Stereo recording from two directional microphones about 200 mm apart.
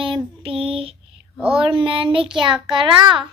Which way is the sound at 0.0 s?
25° right (ahead or behind).